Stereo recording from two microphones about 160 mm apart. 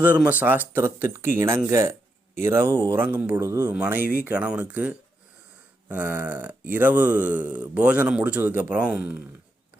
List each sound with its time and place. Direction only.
0.1 s a man's voice: 10° right (ahead or behind)